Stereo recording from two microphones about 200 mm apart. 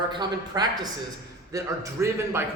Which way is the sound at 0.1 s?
20° right (ahead or behind).